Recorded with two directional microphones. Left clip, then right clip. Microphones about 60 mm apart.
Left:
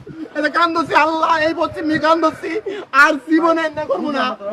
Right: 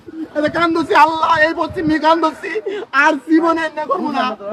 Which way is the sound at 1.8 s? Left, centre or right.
Left.